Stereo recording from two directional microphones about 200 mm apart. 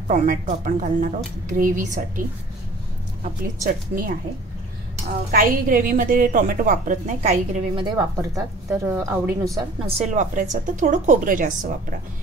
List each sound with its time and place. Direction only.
0.1 s a woman's voice: 40° right (ahead or behind)
3.6 s a woman's voice: 45° right (ahead or behind)
5.3 s a woman's voice: 45° right (ahead or behind)
7.8 s a woman's voice: 15° right (ahead or behind)
9.6 s a woman's voice: 30° right (ahead or behind)